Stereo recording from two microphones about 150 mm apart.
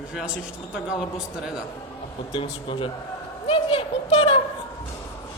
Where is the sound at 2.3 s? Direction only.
35° left (ahead or behind).